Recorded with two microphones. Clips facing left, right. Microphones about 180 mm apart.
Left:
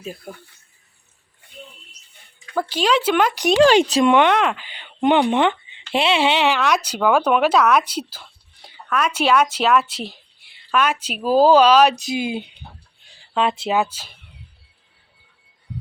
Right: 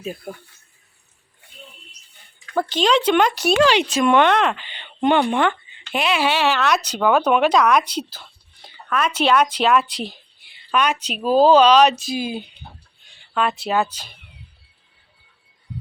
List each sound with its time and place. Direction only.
0.0 s speech: 5° right (ahead or behind)
2.6 s speech: 10° left (ahead or behind)
3.6 s speech: 40° left (ahead or behind)
4.0 s speech: 15° left (ahead or behind)
12.0 s speech: 20° left (ahead or behind)
13.1 s a sound: 25° left (ahead or behind)
13.7 s speech: 10° left (ahead or behind)